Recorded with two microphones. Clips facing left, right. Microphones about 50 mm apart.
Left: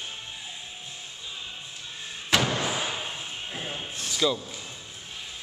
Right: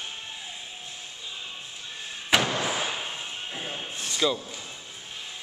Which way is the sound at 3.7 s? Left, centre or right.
Centre.